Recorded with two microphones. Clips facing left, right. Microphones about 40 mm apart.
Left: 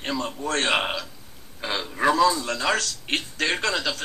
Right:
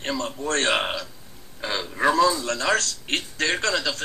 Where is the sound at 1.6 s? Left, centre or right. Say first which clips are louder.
Even; left.